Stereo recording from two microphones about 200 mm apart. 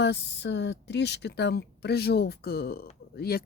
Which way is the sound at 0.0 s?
55° left (ahead or behind).